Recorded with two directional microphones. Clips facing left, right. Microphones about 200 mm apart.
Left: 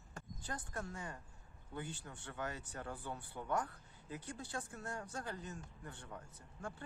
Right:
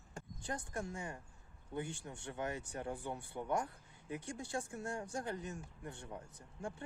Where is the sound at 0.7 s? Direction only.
15° right (ahead or behind).